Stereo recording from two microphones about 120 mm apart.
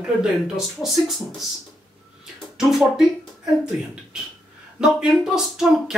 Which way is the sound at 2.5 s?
Centre (ahead or behind).